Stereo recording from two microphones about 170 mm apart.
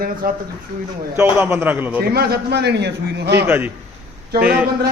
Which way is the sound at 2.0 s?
65° right (ahead or behind).